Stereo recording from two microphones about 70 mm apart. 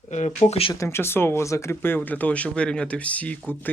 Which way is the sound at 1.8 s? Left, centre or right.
Left.